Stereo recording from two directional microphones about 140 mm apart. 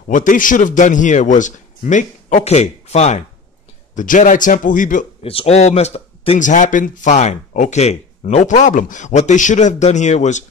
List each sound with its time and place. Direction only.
0.1 s speech: 70° left (ahead or behind); by 3.3 s 55° left (ahead or behind)
3.9 s a man's voice: 65° left (ahead or behind)
5.2 s speech: 45° left (ahead or behind)
6.4 s speech: 65° left (ahead or behind)